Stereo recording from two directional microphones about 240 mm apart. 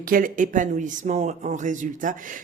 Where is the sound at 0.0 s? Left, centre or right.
Right.